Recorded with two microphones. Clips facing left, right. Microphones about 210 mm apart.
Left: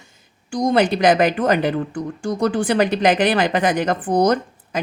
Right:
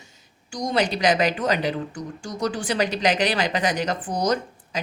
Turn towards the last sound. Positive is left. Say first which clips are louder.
# left 5 dB
turn(degrees=55)  # may be behind; listen again after turning